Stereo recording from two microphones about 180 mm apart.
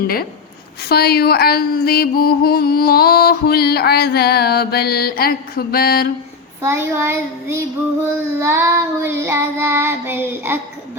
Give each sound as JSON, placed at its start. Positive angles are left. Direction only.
{"t": 0.9, "sound": "speech", "side_deg": 60}
{"t": 6.6, "sound": "child singing", "side_deg": -15}